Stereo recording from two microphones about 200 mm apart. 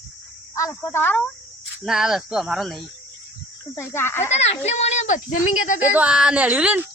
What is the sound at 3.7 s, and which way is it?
Speech, 10° left (ahead or behind).